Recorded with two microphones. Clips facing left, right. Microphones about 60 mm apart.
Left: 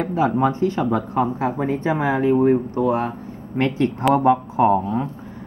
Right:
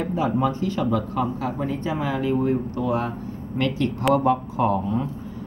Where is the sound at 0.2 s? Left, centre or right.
Left.